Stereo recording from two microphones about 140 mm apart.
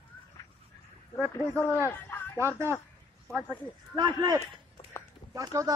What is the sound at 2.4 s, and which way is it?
Speech, 20° right (ahead or behind).